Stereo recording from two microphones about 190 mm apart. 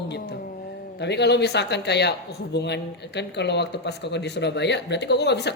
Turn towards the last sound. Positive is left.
turn(degrees=60)  # may be behind; listen again after turning